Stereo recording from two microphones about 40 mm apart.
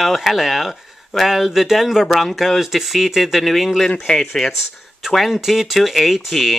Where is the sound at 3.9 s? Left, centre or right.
Centre.